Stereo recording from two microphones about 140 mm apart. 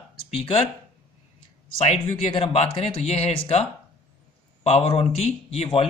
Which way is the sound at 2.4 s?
45° left (ahead or behind).